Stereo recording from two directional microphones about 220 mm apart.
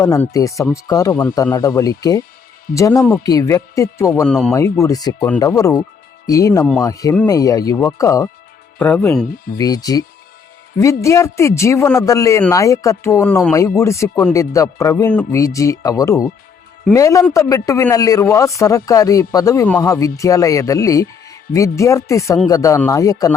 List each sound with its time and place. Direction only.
0.0 s speech: 15° left (ahead or behind)
4.5 s speech: 15° left (ahead or behind)